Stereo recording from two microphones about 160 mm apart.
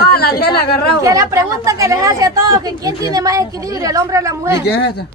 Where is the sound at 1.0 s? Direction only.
20° right (ahead or behind).